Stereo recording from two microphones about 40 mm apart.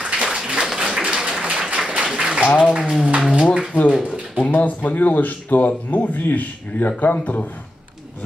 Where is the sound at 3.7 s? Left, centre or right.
Right.